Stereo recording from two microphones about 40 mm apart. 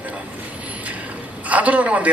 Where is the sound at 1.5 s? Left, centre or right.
Right.